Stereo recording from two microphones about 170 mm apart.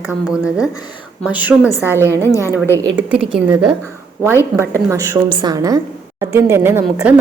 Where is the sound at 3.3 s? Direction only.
5° right (ahead or behind).